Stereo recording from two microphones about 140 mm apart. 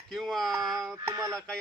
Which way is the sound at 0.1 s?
Centre (ahead or behind).